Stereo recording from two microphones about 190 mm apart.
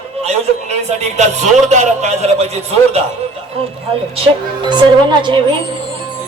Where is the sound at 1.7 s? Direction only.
35° right (ahead or behind).